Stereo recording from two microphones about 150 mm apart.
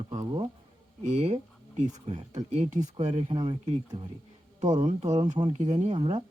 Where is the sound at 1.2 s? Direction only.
50° right (ahead or behind).